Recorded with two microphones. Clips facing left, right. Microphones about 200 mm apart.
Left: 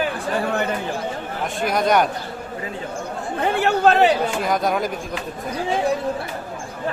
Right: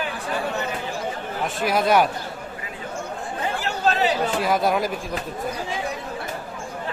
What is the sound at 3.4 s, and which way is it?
Chatter, 60° left (ahead or behind).